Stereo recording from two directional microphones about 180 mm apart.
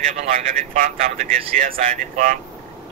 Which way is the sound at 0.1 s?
50° right (ahead or behind).